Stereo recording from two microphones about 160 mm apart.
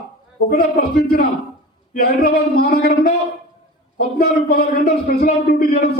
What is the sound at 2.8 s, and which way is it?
A man's voice, 75° left (ahead or behind).